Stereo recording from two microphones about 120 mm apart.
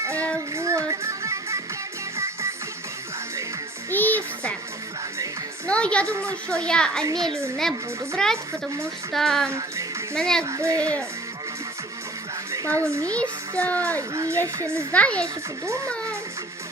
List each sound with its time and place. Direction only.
0.0 s child singing: 25° right (ahead or behind)
0.5 s music: 25° right (ahead or behind)
3.9 s music: 15° left (ahead or behind)
5.6 s music: 10° left (ahead or behind)
6.5 s a child's voice: 10° left (ahead or behind)
8.1 s speech: 5° left (ahead or behind)
9.5 s speech: 25° right (ahead or behind)
10.2 s speech: 5° left (ahead or behind)
10.4 s speech: 25° right (ahead or behind)
12.5 s speech: 25° right (ahead or behind)
13.6 s a child's voice: 10° left (ahead or behind)
14.1 s speech: 25° right (ahead or behind)
14.9 s a child's voice: 10° left (ahead or behind)